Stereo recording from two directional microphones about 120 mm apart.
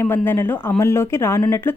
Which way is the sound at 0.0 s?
20° left (ahead or behind).